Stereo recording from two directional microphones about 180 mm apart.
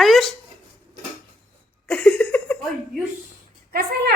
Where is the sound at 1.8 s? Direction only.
5° left (ahead or behind).